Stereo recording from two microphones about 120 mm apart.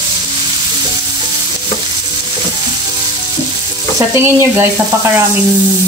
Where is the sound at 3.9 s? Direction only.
20° right (ahead or behind).